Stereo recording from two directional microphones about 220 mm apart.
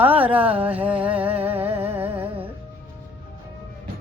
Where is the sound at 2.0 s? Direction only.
10° right (ahead or behind).